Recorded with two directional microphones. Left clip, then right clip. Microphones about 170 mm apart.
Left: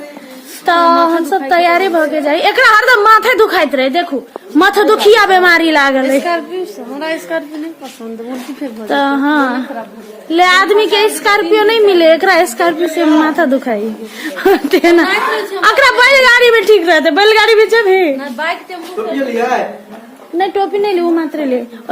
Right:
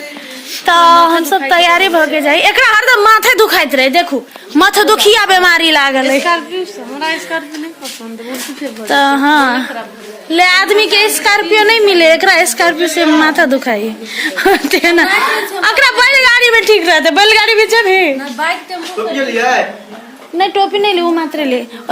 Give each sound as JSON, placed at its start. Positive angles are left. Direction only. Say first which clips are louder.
{"t": 0.6, "sound": "female singing", "louder": "right 3 dB", "side_deg": 0}
{"t": 1.3, "sound": "a woman's voice", "louder": "right 1 dB", "side_deg": 0}
{"t": 2.6, "sound": "a woman's voice", "louder": "left 1 dB", "side_deg": -30}
{"t": 4.5, "sound": "a woman's voice", "louder": "right 1 dB", "side_deg": -5}
{"t": 6.2, "sound": "a woman's voice", "louder": "right 2 dB", "side_deg": 65}
{"t": 8.9, "sound": "a woman's voice", "louder": "right 3 dB", "side_deg": 0}
{"t": 20.4, "sound": "a woman's voice", "louder": "right 2 dB", "side_deg": 15}